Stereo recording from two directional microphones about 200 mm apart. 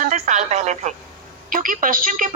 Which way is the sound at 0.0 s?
40° right (ahead or behind).